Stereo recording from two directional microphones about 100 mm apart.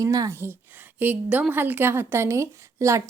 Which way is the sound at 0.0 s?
35° right (ahead or behind).